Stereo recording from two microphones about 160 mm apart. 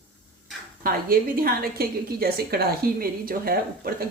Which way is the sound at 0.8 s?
65° right (ahead or behind).